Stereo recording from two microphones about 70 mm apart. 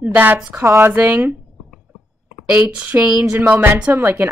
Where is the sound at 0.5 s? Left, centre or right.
Right.